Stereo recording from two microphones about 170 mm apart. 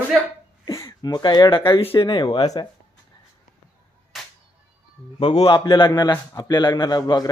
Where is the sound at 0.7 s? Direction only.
20° left (ahead or behind).